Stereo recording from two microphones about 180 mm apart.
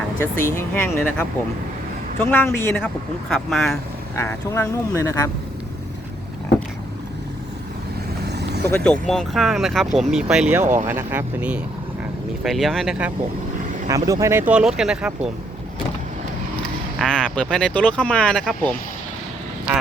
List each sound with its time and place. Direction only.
0.2 s speech: 15° left (ahead or behind)
4.1 s speech: 15° left (ahead or behind)
8.2 s vehicle: 65° right (ahead or behind)
8.6 s speech: 10° left (ahead or behind)
10.6 s speech: 40° right (ahead or behind)
10.8 s speech: 15° right (ahead or behind)
13.8 s speech: 20° right (ahead or behind)
17.0 s speech: 5° left (ahead or behind)